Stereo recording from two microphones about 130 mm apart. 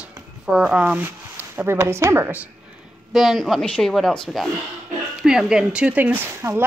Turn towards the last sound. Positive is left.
turn(degrees=-15)  # may be behind; listen again after turning